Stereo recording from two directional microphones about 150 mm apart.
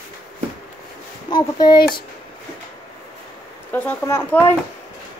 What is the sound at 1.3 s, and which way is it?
Speech, 30° left (ahead or behind).